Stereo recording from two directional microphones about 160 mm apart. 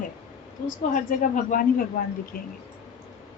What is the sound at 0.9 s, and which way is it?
Speech, 55° left (ahead or behind).